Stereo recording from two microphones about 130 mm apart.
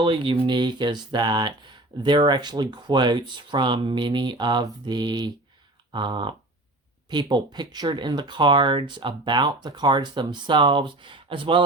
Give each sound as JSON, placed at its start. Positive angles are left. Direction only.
{"t": 0.0, "sound": "speech", "side_deg": -40}